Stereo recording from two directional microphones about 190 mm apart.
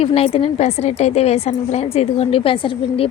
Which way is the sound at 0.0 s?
30° left (ahead or behind).